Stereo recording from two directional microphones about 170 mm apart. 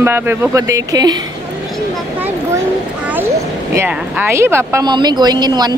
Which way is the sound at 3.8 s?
10° right (ahead or behind).